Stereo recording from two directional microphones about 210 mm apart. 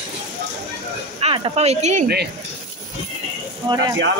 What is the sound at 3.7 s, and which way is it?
Speech, 20° right (ahead or behind).